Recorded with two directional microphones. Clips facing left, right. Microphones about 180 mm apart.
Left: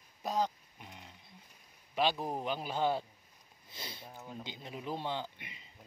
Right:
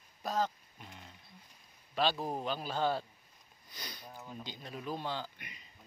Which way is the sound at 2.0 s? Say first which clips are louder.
Even; 15° left (ahead or behind).